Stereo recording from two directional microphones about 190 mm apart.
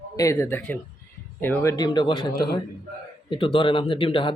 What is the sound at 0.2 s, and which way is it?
Speech, 15° left (ahead or behind).